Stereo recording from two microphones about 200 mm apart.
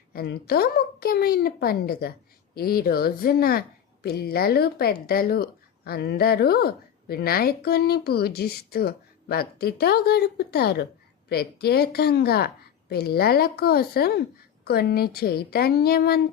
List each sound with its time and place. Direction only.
0.1 s a woman's voice: 50° left (ahead or behind)